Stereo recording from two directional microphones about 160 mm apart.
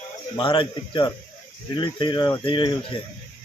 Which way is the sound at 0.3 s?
30° left (ahead or behind).